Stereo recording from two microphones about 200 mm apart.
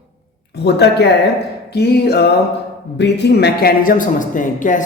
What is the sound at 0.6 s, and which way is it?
Speech, 55° left (ahead or behind).